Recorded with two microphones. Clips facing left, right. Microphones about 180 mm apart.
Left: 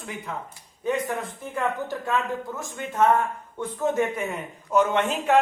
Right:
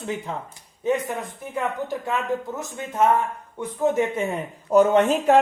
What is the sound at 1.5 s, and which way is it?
Speech, 15° right (ahead or behind).